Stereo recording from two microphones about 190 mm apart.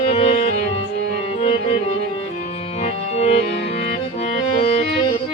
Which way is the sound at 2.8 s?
35° left (ahead or behind).